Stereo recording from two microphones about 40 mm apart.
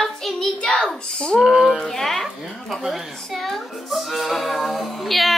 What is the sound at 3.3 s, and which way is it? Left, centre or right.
Speech, centre.